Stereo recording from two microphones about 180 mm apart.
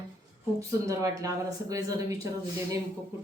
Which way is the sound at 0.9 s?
15° right (ahead or behind).